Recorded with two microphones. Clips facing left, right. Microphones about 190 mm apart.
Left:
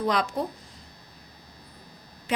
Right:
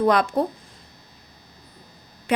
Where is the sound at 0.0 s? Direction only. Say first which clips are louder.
Right 7 dB; 55° right (ahead or behind).